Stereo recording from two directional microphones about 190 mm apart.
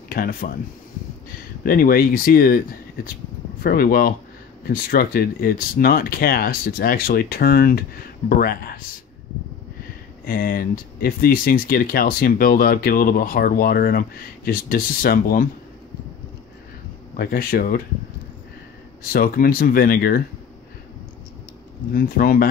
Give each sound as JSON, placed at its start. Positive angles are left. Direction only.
{"t": 0.1, "sound": "speech", "side_deg": 50}
{"t": 1.6, "sound": "speech", "side_deg": 50}
{"t": 10.2, "sound": "speech", "side_deg": 50}
{"t": 17.2, "sound": "speech", "side_deg": 50}
{"t": 19.1, "sound": "speech", "side_deg": 50}
{"t": 21.9, "sound": "speech", "side_deg": 50}